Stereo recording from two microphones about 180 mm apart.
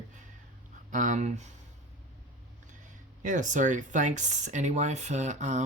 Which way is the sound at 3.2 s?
45° right (ahead or behind).